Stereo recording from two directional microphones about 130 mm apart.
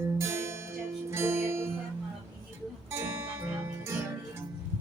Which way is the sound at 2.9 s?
20° right (ahead or behind).